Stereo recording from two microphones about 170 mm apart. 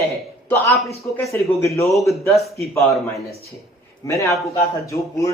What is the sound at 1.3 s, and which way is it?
Speech, 15° left (ahead or behind).